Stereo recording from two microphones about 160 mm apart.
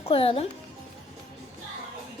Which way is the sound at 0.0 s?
35° left (ahead or behind).